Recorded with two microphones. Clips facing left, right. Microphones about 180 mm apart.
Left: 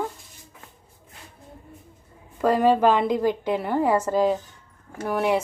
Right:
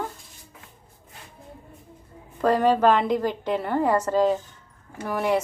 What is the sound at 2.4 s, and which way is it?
A woman's voice, 10° left (ahead or behind).